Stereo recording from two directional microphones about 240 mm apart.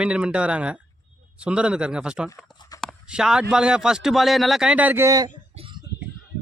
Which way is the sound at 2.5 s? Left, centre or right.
Centre.